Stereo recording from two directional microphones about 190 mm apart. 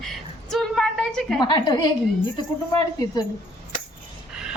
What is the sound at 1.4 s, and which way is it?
Speech, 25° left (ahead or behind).